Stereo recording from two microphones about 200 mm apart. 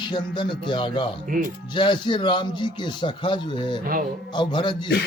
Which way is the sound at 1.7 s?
25° left (ahead or behind).